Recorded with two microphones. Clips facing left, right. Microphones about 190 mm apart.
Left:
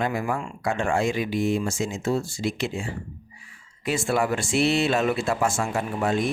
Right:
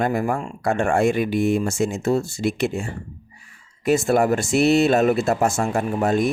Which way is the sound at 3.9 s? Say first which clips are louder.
Right 6 dB; 45° right (ahead or behind).